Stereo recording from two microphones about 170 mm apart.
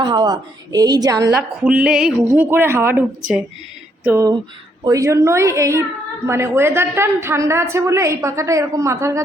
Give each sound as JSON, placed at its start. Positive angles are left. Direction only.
{"t": 0.0, "sound": "a woman's voice", "side_deg": -25}
{"t": 1.6, "sound": "speech", "side_deg": -5}
{"t": 4.0, "sound": "a sound", "side_deg": -10}
{"t": 4.8, "sound": "a woman's voice", "side_deg": -20}